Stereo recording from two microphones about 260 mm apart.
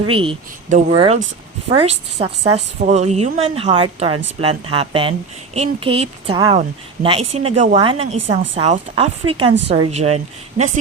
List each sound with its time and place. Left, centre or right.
0.0 s a woman's voice: centre